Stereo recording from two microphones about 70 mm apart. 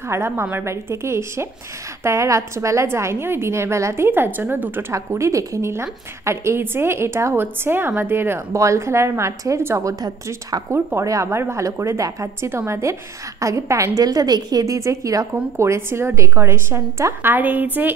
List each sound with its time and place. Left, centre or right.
0.1 s a woman's voice: right
4.9 s a woman's voice: right
11.0 s a woman's voice: right
11.2 s a woman's voice: right
14.0 s a woman's voice: right
15.5 s a woman's voice: right